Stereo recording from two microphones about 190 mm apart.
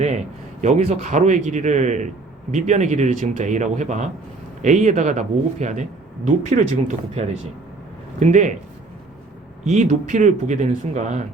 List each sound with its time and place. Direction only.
0.6 s speech: 35° right (ahead or behind)
9.6 s speech: 40° right (ahead or behind)